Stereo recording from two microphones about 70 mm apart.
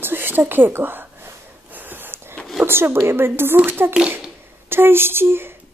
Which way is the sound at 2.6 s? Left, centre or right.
Right.